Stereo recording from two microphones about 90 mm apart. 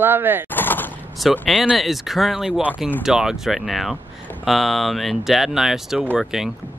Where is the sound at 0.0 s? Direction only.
25° right (ahead or behind).